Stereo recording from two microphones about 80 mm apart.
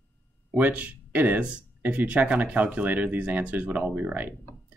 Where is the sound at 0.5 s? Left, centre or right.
Centre.